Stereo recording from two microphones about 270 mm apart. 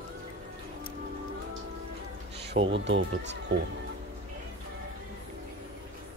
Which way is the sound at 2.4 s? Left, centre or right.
Right.